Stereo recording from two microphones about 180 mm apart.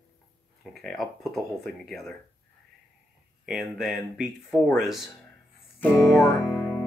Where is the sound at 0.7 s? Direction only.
Centre (ahead or behind).